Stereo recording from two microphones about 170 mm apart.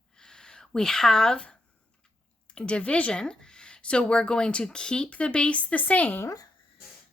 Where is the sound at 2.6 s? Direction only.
5° left (ahead or behind).